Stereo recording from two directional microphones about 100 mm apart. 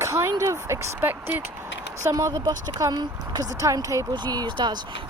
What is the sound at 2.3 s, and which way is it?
Speech, 40° right (ahead or behind).